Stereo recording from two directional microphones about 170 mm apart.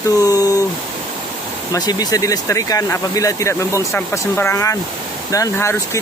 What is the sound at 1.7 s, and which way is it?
Speech, 25° left (ahead or behind).